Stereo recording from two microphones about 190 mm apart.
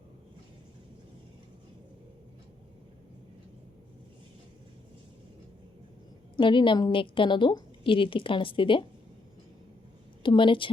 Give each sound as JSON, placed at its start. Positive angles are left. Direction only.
{"t": 6.3, "sound": "a woman's voice", "side_deg": 25}
{"t": 10.2, "sound": "a woman's voice", "side_deg": 25}